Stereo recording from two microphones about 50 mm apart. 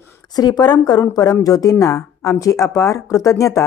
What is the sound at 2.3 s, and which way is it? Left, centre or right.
Speech, left.